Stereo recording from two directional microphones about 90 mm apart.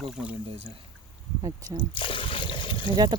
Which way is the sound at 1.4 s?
50° right (ahead or behind).